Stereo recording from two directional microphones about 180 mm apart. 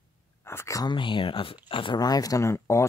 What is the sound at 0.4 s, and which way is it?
Speech, 15° left (ahead or behind).